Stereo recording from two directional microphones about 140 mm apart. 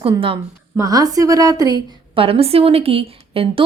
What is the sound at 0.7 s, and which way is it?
A woman's voice, 25° right (ahead or behind).